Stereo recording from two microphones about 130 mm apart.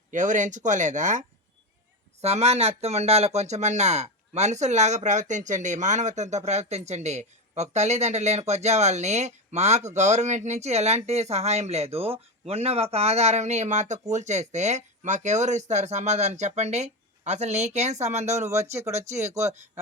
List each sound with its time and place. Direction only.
0.1 s speech: 75° right (ahead or behind)
2.2 s speech: 55° right (ahead or behind)
18.3 s speech: 25° right (ahead or behind)
18.8 s speech: 60° right (ahead or behind)